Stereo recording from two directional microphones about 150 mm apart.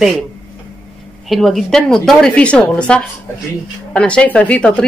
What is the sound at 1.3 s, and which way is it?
A woman's voice, centre (ahead or behind).